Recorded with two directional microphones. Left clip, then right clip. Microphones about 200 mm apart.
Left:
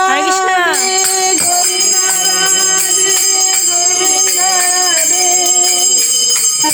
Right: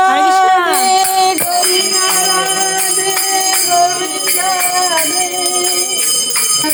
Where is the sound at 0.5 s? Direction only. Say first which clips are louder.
Right 1 dB; 5° right (ahead or behind).